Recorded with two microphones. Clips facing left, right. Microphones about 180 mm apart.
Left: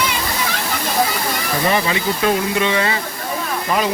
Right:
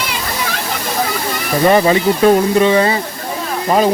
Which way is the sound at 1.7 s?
35° right (ahead or behind).